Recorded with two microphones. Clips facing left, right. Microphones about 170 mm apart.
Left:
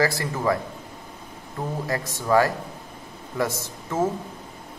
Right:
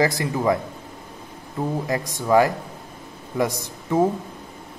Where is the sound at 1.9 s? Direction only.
15° right (ahead or behind).